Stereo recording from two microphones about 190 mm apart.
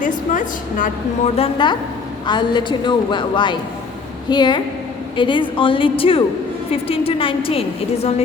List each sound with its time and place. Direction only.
0.0 s a woman's voice: 45° left (ahead or behind)
1.4 s a woman's voice: 25° left (ahead or behind)